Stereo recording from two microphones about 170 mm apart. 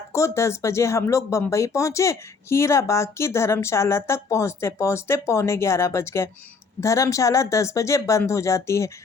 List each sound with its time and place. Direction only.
0.1 s speech: 15° left (ahead or behind)